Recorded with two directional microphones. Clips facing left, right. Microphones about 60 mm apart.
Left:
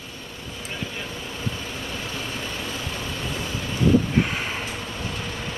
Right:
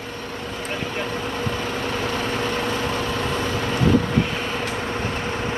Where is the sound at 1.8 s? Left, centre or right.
Right.